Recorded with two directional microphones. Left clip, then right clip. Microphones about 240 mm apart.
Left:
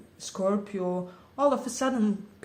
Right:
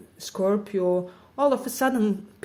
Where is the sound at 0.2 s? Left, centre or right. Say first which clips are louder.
Right 4 dB; right.